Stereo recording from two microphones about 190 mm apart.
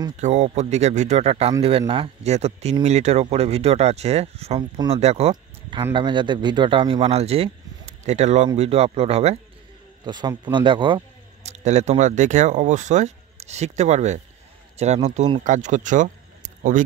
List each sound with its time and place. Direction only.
0.2 s speech: 40° right (ahead or behind)
5.3 s a sound: 25° right (ahead or behind)
5.9 s speech: 25° right (ahead or behind)
10.0 s speech: 20° right (ahead or behind)
11.5 s speech: 35° right (ahead or behind)